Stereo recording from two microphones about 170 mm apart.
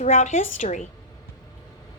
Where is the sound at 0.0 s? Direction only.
45° left (ahead or behind).